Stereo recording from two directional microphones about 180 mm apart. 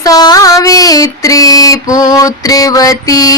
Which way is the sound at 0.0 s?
20° left (ahead or behind).